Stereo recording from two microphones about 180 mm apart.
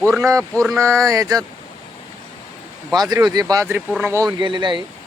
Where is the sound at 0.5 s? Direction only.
Centre (ahead or behind).